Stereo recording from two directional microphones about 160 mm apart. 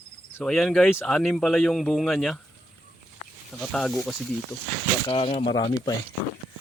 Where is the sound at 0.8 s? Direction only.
15° left (ahead or behind).